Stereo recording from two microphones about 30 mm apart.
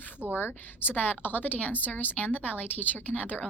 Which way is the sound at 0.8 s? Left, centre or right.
Left.